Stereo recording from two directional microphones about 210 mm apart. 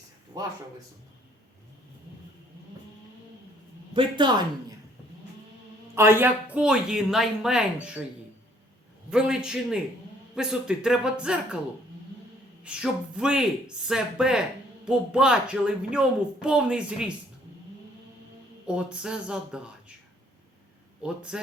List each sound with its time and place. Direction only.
3.9 s speech: 20° right (ahead or behind)
5.9 s a woman's voice: 10° right (ahead or behind)
9.0 s a woman's voice: 5° right (ahead or behind)
12.6 s a woman's voice: 5° right (ahead or behind)
18.7 s a woman's voice: 5° right (ahead or behind)
21.0 s a woman's voice: 5° right (ahead or behind)